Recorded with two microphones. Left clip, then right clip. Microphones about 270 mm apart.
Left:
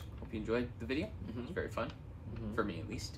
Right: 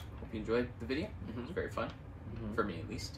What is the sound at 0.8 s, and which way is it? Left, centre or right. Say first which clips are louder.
Speech: even; centre.